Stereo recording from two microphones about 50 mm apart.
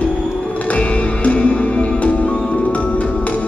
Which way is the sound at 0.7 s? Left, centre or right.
Left.